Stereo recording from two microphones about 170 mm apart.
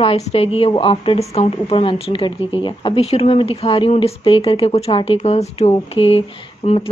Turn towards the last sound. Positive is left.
turn(degrees=35)  # may be behind; listen again after turning